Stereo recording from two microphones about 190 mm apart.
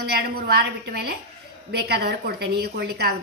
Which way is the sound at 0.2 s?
55° right (ahead or behind).